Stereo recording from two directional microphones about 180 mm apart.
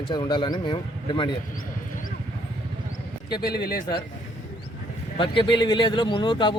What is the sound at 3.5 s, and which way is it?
Speech, 60° left (ahead or behind).